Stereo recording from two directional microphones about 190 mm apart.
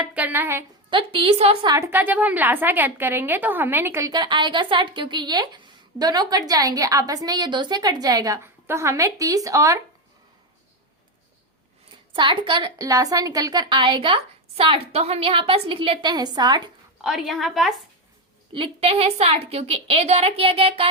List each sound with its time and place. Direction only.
0.0 s a sound: 5° right (ahead or behind)
0.9 s a woman's voice: 25° right (ahead or behind)
1.7 s a woman's voice: 15° right (ahead or behind)
12.1 s a woman's voice: 25° right (ahead or behind)
17.0 s a woman's voice: centre (ahead or behind)
18.5 s a woman's voice: 30° right (ahead or behind)